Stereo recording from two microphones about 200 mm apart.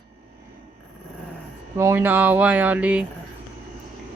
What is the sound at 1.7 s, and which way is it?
Speech, 10° right (ahead or behind).